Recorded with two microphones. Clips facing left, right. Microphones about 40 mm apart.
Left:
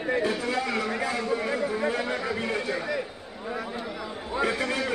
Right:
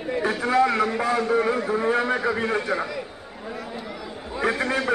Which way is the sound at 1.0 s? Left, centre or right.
Right.